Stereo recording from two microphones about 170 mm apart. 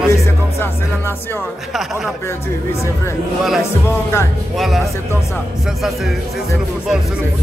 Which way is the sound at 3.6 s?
15° left (ahead or behind).